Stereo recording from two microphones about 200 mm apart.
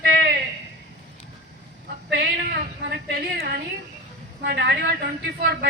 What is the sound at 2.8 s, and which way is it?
A man's voice, 55° right (ahead or behind).